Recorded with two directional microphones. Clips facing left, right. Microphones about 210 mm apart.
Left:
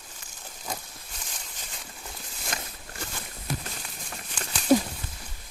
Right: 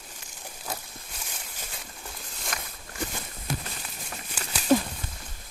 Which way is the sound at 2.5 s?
25° left (ahead or behind).